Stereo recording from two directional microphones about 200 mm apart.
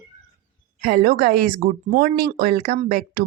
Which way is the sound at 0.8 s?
50° right (ahead or behind).